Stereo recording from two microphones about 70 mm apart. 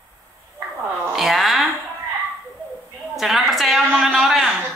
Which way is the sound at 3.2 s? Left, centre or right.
Centre.